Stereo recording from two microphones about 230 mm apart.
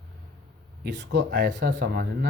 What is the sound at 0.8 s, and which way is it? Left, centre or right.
Speech, right.